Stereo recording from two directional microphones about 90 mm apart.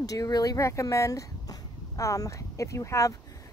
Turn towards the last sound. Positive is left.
turn(degrees=35)  # may be behind; listen again after turning